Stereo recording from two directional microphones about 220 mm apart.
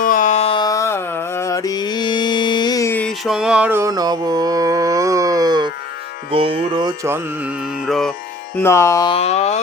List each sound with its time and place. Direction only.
0.0 s music: 35° left (ahead or behind); by 8.1 s centre (ahead or behind)
8.6 s music: 15° left (ahead or behind)
9.1 s a sound: 30° left (ahead or behind)